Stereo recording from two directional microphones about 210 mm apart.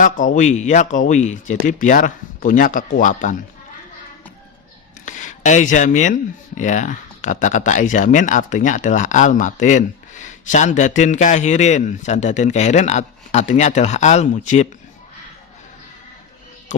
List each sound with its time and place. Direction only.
0.3 s speech: 35° left (ahead or behind)
5.0 s speech: 35° left (ahead or behind)